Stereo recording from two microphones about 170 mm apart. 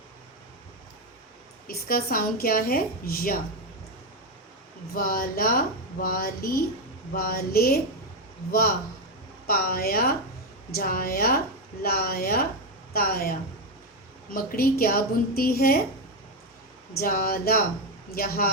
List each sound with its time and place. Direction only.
1.6 s a woman's voice: 60° left (ahead or behind)
4.9 s a woman's voice: 55° left (ahead or behind)
9.5 s a woman's voice: 60° left (ahead or behind)
14.3 s a woman's voice: 60° left (ahead or behind)
16.9 s a woman's voice: 60° left (ahead or behind)